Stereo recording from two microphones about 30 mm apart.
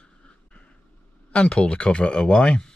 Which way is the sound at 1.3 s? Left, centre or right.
Left.